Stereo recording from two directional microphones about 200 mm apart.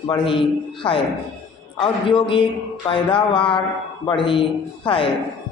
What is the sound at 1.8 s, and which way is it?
Mantra, 25° left (ahead or behind).